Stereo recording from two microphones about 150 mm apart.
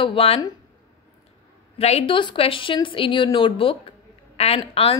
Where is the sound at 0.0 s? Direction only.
35° left (ahead or behind).